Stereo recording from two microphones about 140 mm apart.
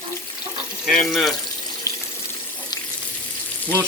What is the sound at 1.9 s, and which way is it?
Water tap, 20° left (ahead or behind).